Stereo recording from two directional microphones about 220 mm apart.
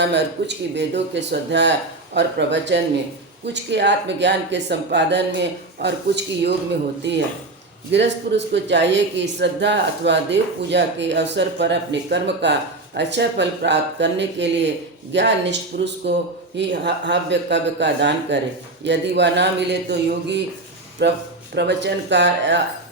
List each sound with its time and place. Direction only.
0.0 s a man's voice: 50° right (ahead or behind)
7.9 s a man's voice: 55° right (ahead or behind)